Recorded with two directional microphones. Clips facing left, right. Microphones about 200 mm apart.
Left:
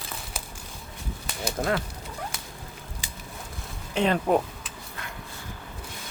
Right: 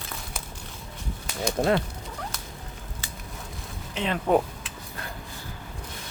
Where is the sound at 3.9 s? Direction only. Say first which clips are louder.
Left 5 dB; 45° left (ahead or behind).